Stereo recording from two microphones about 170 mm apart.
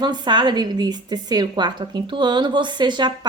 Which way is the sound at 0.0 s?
25° right (ahead or behind).